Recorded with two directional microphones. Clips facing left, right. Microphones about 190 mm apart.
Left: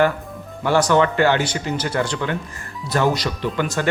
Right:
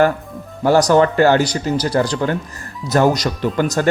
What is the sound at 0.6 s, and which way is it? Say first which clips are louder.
Speech: right 4 dB; 40° right (ahead or behind).